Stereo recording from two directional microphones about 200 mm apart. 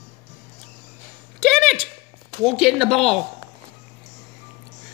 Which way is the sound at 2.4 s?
Centre (ahead or behind).